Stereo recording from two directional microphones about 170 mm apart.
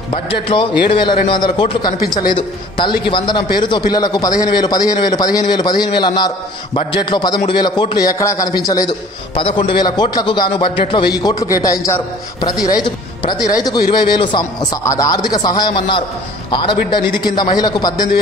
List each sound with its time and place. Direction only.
0.1 s a man's voice: 30° left (ahead or behind)